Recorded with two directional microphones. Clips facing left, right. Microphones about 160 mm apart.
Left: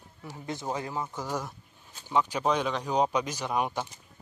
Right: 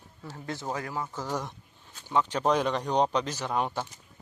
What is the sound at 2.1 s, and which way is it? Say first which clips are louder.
Speech: right 1 dB; 10° left (ahead or behind).